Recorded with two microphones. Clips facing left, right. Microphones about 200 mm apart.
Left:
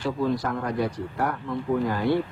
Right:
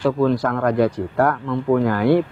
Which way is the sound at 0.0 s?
80° right.